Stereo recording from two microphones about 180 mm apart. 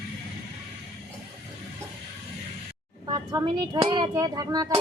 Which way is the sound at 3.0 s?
20° right (ahead or behind).